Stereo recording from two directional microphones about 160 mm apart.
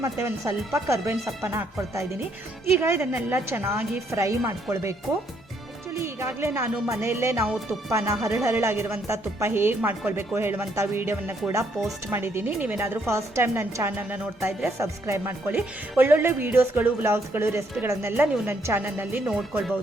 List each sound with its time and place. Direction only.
0.0 s speech: 20° right (ahead or behind)